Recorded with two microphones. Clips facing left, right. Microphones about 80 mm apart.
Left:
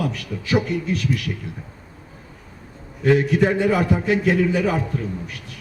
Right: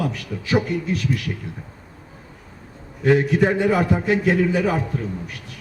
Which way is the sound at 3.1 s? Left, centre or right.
Right.